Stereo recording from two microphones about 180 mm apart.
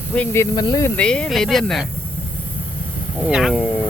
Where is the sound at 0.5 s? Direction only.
20° left (ahead or behind).